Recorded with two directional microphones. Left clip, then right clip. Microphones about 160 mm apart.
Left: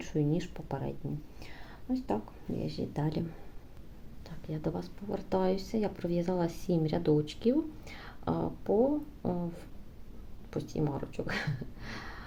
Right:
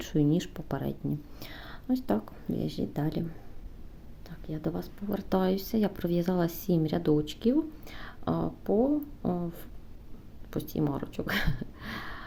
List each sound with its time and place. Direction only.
0.0 s speech: 35° right (ahead or behind)
1.4 s a sound: 40° right (ahead or behind)
2.6 s speech: 30° right (ahead or behind)
4.4 s speech: 20° right (ahead or behind)
5.0 s speech: 35° right (ahead or behind)